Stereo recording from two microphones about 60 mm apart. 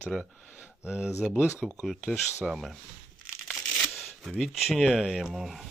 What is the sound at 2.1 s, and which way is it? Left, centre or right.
Speech, centre.